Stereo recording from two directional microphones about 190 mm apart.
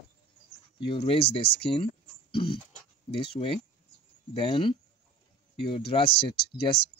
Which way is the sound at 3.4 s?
40° left (ahead or behind).